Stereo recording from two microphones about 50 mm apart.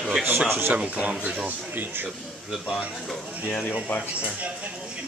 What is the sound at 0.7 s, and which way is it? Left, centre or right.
Speech, right.